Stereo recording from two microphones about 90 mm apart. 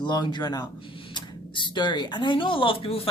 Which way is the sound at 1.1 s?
60° left (ahead or behind).